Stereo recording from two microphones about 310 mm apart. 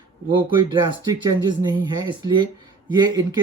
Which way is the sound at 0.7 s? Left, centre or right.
Centre.